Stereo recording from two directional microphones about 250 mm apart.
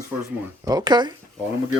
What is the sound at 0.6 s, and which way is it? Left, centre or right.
Speech, centre.